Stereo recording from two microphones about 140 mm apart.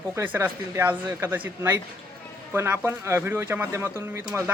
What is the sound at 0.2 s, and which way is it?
Speech, 15° right (ahead or behind).